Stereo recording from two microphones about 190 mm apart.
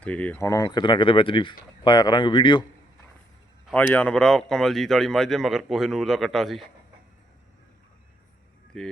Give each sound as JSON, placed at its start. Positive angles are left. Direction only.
{"t": 0.0, "sound": "speech", "side_deg": 5}
{"t": 3.7, "sound": "speech", "side_deg": 5}
{"t": 8.7, "sound": "speech", "side_deg": 5}